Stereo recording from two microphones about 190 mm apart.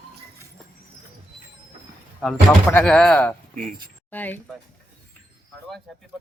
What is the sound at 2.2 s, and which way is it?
Speech, 5° left (ahead or behind).